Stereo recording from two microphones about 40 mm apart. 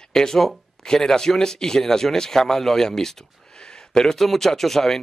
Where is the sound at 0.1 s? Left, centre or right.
Centre.